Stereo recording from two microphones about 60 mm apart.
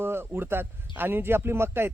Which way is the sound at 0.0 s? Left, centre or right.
Right.